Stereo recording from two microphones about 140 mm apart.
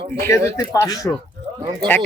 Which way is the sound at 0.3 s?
25° left (ahead or behind).